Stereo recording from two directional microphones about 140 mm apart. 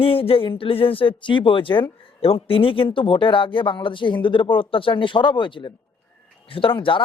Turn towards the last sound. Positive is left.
turn(degrees=35)  # may be behind; listen again after turning